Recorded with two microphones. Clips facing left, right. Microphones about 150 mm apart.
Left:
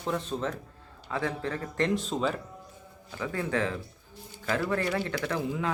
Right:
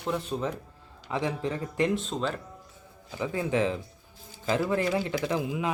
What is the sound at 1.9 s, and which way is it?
Speech, centre (ahead or behind).